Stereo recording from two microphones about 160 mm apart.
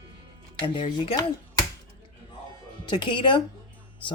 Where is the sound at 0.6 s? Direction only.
30° left (ahead or behind).